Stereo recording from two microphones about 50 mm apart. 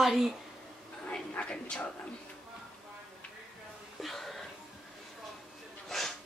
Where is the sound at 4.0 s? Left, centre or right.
Centre.